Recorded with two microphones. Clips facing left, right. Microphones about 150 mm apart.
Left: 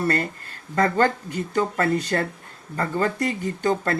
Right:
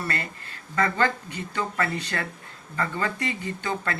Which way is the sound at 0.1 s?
45° left (ahead or behind).